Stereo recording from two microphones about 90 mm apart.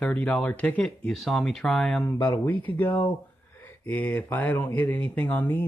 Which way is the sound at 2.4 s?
20° left (ahead or behind).